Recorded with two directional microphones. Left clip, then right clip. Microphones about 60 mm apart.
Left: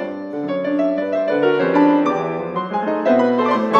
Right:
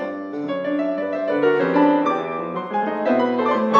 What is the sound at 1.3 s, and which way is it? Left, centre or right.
Music, right.